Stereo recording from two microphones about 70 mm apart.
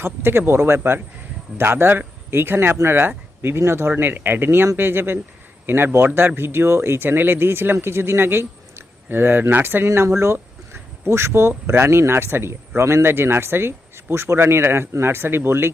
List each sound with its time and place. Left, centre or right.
0.0 s speech: right